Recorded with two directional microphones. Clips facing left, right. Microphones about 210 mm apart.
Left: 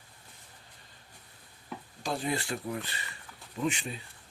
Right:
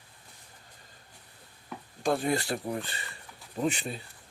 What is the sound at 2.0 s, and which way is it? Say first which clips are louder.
Speech: right 5 dB; 45° right (ahead or behind).